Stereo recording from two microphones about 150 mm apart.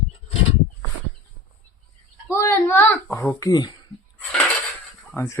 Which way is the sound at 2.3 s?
20° left (ahead or behind).